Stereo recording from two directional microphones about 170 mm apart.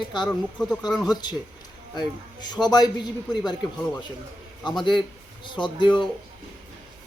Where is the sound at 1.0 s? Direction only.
25° left (ahead or behind).